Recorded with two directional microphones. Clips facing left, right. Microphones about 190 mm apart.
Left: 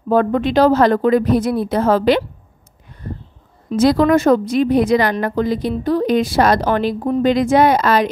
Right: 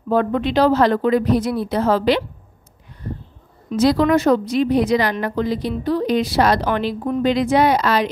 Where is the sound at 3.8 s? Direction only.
50° left (ahead or behind).